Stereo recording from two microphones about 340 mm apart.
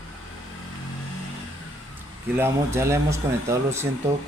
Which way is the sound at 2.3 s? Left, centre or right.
Centre.